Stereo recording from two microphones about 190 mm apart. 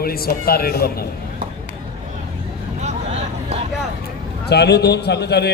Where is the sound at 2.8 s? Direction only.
35° right (ahead or behind).